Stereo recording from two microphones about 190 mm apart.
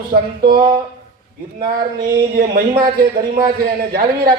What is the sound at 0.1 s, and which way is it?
A man's voice, 50° right (ahead or behind).